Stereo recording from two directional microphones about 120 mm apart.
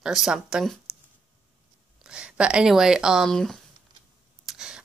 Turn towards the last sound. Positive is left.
turn(degrees=-5)  # may be behind; listen again after turning